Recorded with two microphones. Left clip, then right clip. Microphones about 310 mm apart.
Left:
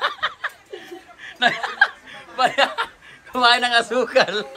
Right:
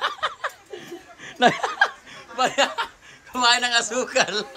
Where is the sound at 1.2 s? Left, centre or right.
Right.